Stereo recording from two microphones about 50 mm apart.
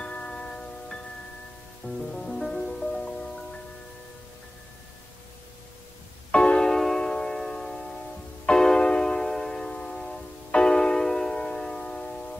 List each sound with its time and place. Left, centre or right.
0.0 s tubular bells: left
1.8 s music: left
2.1 s music: centre
6.3 s music: left